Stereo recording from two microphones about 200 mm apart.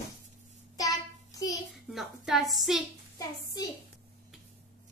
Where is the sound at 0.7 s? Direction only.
15° left (ahead or behind).